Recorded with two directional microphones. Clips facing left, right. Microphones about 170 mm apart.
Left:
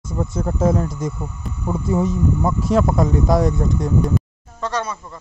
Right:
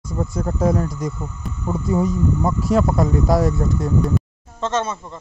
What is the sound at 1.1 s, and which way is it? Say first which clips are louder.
Speech: even; 15° left (ahead or behind).